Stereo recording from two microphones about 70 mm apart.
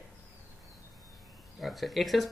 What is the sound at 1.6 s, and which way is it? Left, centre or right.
Speech, centre.